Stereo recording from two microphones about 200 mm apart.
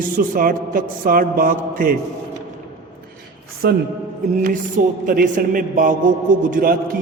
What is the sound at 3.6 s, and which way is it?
Speech, 50° right (ahead or behind).